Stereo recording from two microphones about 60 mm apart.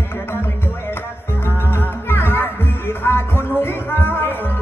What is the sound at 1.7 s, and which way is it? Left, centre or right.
Music, left.